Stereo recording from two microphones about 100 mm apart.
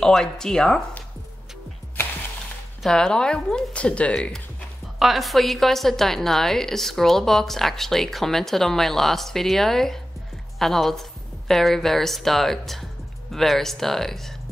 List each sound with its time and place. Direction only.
0.0 s speech: 5° left (ahead or behind)
2.8 s speech: 5° left (ahead or behind)
4.9 s a woman's voice: centre (ahead or behind)